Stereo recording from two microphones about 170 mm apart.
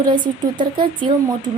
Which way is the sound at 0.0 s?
25° right (ahead or behind).